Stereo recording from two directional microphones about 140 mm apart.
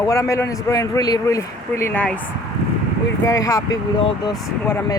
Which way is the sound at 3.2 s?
25° left (ahead or behind).